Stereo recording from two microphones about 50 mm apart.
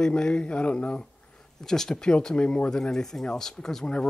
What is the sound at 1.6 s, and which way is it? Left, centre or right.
Speech, centre.